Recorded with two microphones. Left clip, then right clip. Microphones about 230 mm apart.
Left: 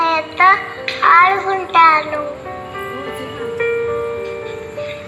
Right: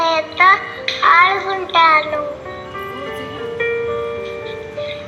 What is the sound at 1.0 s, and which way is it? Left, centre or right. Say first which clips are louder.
Music: left 1 dB; left.